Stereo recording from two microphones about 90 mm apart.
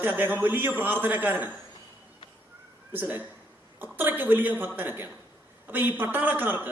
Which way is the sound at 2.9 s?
20° right (ahead or behind).